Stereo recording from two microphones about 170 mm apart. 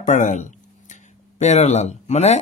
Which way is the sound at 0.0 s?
50° left (ahead or behind).